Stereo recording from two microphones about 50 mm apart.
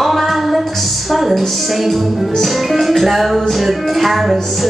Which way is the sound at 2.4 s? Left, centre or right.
Centre.